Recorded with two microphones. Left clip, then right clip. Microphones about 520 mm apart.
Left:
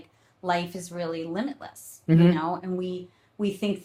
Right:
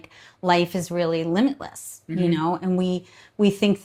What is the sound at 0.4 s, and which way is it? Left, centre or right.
Speech, right.